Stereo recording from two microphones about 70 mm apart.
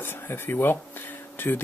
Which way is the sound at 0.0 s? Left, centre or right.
Left.